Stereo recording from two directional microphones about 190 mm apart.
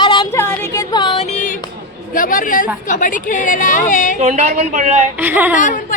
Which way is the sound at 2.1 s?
45° left (ahead or behind).